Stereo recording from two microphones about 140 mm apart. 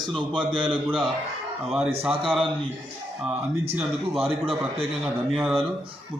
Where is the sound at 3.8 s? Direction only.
Centre (ahead or behind).